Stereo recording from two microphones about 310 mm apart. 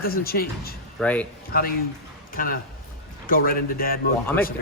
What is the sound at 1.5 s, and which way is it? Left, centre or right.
A man's voice, left.